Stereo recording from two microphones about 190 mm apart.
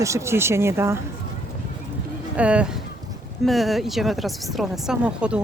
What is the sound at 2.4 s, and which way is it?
Speech, 5° right (ahead or behind).